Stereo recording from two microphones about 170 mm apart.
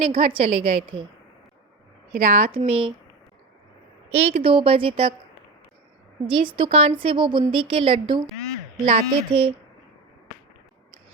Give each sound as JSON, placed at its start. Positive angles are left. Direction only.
{"t": 0.2, "sound": "a woman's voice", "side_deg": -30}
{"t": 2.1, "sound": "a woman's voice", "side_deg": -40}
{"t": 4.1, "sound": "a woman's voice", "side_deg": -40}
{"t": 6.2, "sound": "a woman's voice", "side_deg": -30}